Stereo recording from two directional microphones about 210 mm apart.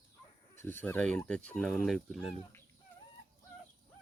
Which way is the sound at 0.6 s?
10° left (ahead or behind).